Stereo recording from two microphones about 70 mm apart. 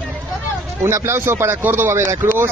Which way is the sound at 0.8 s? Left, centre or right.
Right.